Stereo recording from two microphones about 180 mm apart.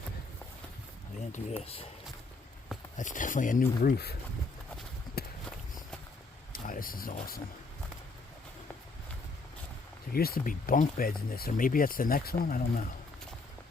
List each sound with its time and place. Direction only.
1.3 s speech: 35° left (ahead or behind)
3.0 s speech: 45° left (ahead or behind); by 4.2 s 60° left (ahead or behind)
5.2 s walk: 60° left (ahead or behind)
6.5 s speech: 50° left (ahead or behind)
10.1 s speech: 55° left (ahead or behind)